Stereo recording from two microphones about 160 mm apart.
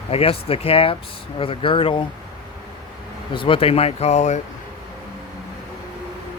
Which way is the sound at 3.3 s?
35° left (ahead or behind).